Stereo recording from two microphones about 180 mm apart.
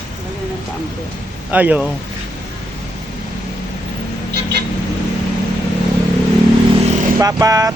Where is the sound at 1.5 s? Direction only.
10° right (ahead or behind).